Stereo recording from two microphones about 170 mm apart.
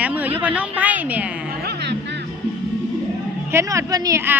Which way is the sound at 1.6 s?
75° right (ahead or behind).